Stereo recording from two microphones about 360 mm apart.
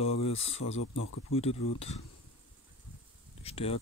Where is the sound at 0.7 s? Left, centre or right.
Left.